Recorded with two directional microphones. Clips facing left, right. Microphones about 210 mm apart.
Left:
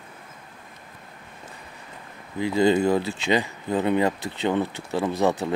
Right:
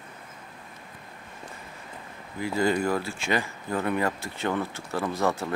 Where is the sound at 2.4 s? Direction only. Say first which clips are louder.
Left 5 dB; 25° left (ahead or behind).